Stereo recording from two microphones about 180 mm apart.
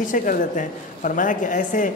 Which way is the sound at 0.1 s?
50° left (ahead or behind).